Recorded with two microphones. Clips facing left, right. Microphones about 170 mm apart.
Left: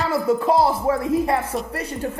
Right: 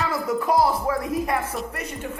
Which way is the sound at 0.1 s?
25° left (ahead or behind).